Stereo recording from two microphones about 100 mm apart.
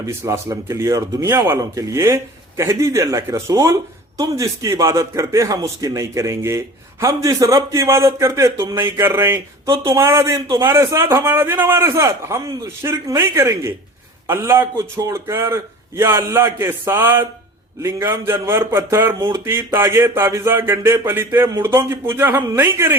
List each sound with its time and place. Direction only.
0.0 s a man's voice: 30° right (ahead or behind)